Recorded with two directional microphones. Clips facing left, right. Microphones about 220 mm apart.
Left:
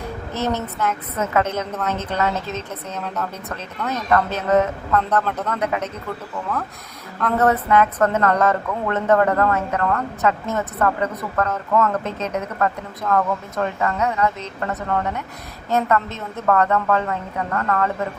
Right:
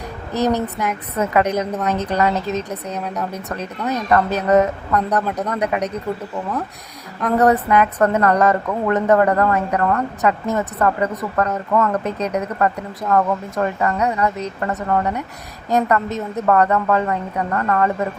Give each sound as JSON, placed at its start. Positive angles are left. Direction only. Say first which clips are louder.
{"t": 0.4, "sound": "a woman's voice", "louder": "right 3 dB", "side_deg": -15}
{"t": 7.2, "sound": "a woman's voice", "louder": "right 3 dB", "side_deg": -15}